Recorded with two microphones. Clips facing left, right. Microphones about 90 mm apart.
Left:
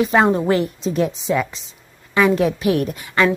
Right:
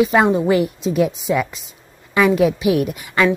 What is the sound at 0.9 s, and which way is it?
Speech, 10° right (ahead or behind).